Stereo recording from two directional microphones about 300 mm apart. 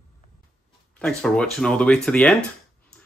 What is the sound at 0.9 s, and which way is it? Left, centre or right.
Speech, centre.